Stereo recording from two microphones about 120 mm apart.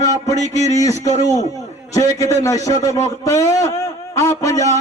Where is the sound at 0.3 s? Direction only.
80° left.